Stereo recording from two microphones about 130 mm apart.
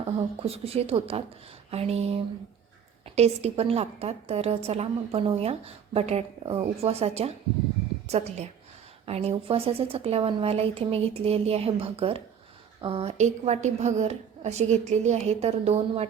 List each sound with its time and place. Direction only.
0.0 s a woman's voice: 50° right (ahead or behind)